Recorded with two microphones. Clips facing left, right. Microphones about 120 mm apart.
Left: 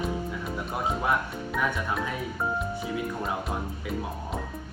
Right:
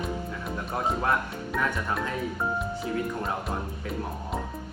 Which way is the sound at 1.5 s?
5° left (ahead or behind).